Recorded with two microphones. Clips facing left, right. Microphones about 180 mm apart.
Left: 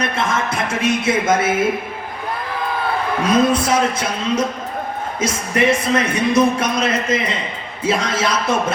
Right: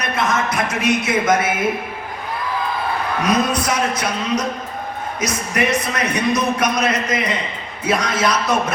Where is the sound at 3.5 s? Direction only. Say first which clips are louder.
Left 3 dB; 25° left (ahead or behind).